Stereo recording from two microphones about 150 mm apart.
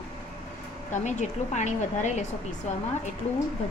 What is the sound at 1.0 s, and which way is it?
Speech, 55° left (ahead or behind).